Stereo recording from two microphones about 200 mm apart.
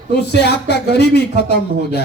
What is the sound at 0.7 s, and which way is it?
Speech, 55° left (ahead or behind).